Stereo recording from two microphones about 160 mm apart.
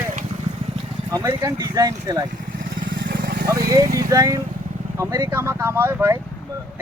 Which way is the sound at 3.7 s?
20° right (ahead or behind).